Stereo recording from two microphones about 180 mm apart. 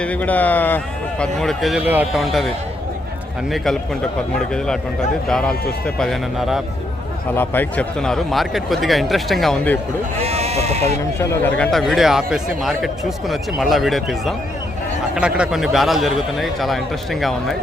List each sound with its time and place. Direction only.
0.0 s a man's voice: 10° left (ahead or behind)
3.5 s a man's voice: centre (ahead or behind)
7.3 s a man's voice: 10° left (ahead or behind)
10.2 s speech: 35° right (ahead or behind)
11.2 s a man's voice: 15° left (ahead or behind)